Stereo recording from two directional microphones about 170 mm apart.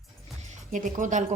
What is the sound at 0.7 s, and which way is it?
Speech, 50° right (ahead or behind).